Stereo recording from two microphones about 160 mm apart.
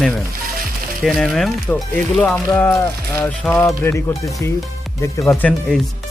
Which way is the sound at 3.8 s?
20° left (ahead or behind).